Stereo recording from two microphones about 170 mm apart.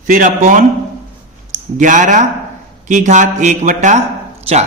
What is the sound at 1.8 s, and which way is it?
A man's voice, 50° right (ahead or behind).